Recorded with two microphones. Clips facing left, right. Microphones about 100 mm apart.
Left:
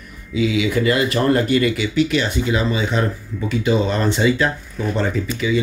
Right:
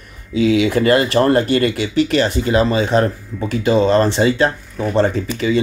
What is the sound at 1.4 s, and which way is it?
Speech, 35° right (ahead or behind).